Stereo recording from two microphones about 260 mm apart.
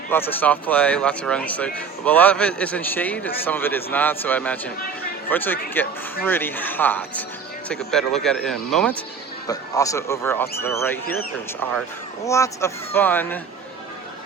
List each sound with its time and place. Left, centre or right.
0.1 s speech: centre